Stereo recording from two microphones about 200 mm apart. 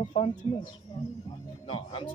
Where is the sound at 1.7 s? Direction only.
25° left (ahead or behind).